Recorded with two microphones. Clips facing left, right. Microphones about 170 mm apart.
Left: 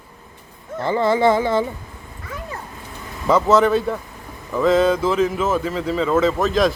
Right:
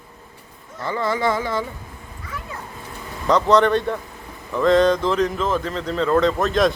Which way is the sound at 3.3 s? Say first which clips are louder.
Left 1 dB; 5° left (ahead or behind).